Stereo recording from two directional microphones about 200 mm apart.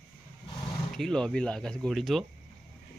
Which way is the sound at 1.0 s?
5° left (ahead or behind).